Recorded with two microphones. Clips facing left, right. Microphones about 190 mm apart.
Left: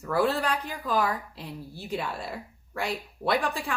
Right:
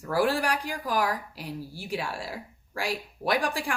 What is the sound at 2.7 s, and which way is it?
Speech, 85° right.